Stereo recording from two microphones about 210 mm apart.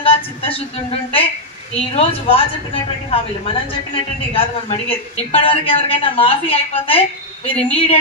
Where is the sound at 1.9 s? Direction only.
25° left (ahead or behind).